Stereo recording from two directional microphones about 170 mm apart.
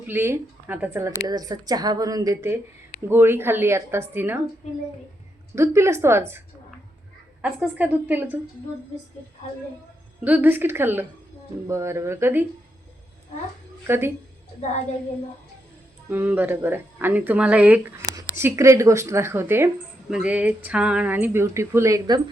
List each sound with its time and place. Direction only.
0.1 s speech: 15° right (ahead or behind)
5.5 s speech: 15° right (ahead or behind)
7.4 s speech: 10° right (ahead or behind)
10.2 s speech: 10° right (ahead or behind)
13.8 s speech: 15° right (ahead or behind)
16.0 s speech: 10° right (ahead or behind)
18.0 s a sound: 20° right (ahead or behind)
18.3 s speech: 15° right (ahead or behind)